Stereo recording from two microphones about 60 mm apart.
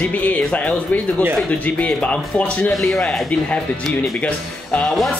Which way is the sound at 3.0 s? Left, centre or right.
Centre.